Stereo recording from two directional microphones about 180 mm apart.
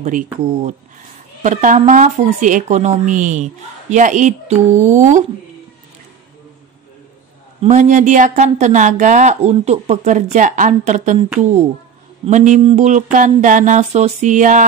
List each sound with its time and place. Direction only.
1.4 s speech: 45° right (ahead or behind)
7.6 s speech: 40° right (ahead or behind)
12.3 s speech: 40° right (ahead or behind)